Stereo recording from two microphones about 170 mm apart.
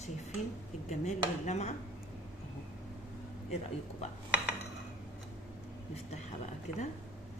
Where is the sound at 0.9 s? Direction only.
45° left (ahead or behind).